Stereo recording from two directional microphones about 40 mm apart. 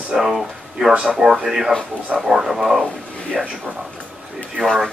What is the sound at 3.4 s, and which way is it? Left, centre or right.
Speech, centre.